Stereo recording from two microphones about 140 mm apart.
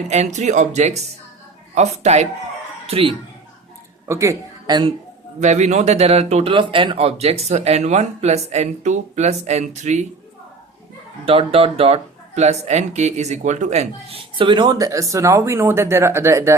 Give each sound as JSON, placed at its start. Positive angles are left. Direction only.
{"t": 0.1, "sound": "speech", "side_deg": -55}
{"t": 4.0, "sound": "speech", "side_deg": -20}
{"t": 5.4, "sound": "speech", "side_deg": -55}
{"t": 6.5, "sound": "speech", "side_deg": -35}
{"t": 11.3, "sound": "speech", "side_deg": -45}